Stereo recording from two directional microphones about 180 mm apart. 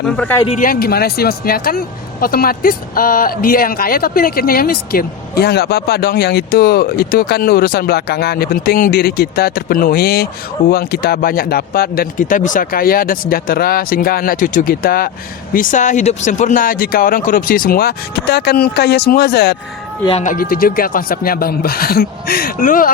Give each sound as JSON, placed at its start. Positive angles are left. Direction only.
{"t": 0.6, "sound": "speech", "side_deg": 55}
{"t": 20.2, "sound": "speech", "side_deg": 50}